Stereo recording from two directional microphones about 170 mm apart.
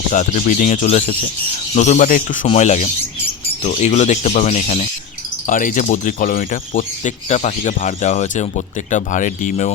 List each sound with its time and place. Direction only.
0.1 s speech: 45° left (ahead or behind)
2.5 s speech: 45° left (ahead or behind)